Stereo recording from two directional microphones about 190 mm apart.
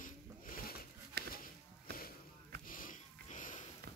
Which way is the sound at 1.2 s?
60° right (ahead or behind).